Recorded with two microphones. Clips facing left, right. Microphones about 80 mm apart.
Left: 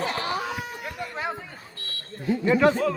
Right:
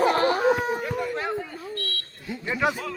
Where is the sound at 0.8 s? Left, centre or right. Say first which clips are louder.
Right 4 dB; centre.